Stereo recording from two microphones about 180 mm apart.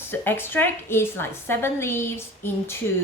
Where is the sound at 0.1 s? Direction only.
10° left (ahead or behind).